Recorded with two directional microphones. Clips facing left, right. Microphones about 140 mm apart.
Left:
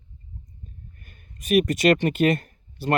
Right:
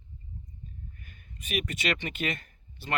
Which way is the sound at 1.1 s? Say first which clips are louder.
Left 14 dB; 45° left (ahead or behind).